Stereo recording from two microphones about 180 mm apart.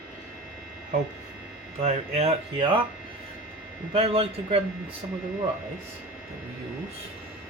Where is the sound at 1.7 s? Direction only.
35° right (ahead or behind).